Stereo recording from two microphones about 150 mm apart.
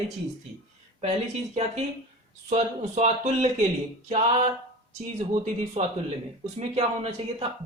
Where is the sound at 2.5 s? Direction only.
50° right (ahead or behind).